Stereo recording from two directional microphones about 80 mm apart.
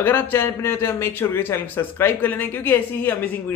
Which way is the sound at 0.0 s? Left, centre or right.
Left.